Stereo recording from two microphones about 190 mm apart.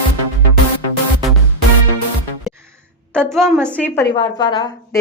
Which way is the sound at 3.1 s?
Centre (ahead or behind).